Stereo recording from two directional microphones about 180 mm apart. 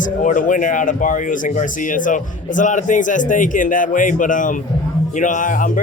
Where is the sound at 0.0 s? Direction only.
45° left (ahead or behind).